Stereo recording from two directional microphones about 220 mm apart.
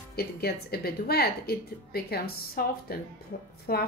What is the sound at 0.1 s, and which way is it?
A woman's voice, 45° left (ahead or behind).